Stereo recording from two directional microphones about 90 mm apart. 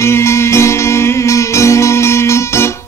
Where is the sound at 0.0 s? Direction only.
30° left (ahead or behind).